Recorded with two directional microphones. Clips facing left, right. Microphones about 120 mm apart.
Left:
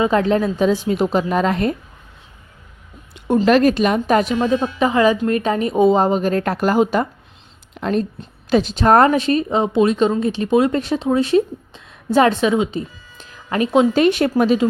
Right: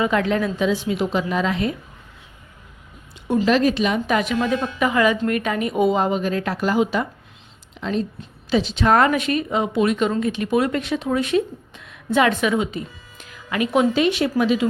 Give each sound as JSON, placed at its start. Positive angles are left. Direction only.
{"t": 0.0, "sound": "a woman's voice", "side_deg": 30}
{"t": 3.4, "sound": "a woman's voice", "side_deg": 50}
{"t": 13.9, "sound": "speech", "side_deg": 45}